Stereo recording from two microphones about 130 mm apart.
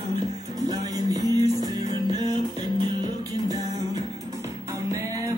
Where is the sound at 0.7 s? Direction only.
30° right (ahead or behind).